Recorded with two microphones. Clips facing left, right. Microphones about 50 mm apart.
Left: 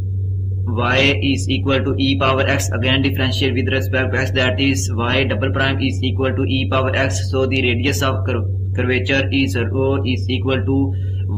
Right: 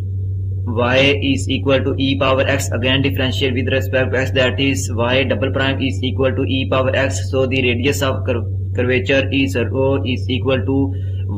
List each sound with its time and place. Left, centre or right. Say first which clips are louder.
0.7 s a man's voice: right 2 dB; centre
1.3 s speech: right 2 dB; centre
2.2 s a man's voice: right 3 dB; centre
3.1 s a man's voice: right 1 dB; centre
5.6 s speech: even; centre
6.1 s speech: right 6 dB; centre
6.4 s speech: right 1 dB; centre
6.7 s speech: right 3 dB; centre
8.1 s speech: right 1 dB; centre
8.8 s speech: right 2 dB; centre
9.6 s speech: right 2 dB; centre
10.0 s speech: even; right
10.4 s speech: right 2 dB; centre